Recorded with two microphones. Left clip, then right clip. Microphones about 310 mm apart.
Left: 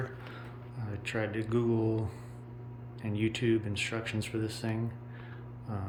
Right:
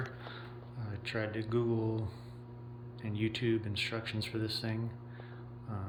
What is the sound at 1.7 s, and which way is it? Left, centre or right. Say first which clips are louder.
Mantra: left 4 dB; centre.